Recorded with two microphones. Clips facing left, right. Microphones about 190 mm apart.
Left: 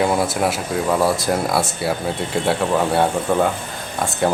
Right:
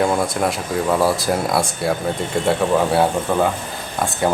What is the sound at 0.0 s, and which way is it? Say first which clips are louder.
Speech: even; 5° left (ahead or behind).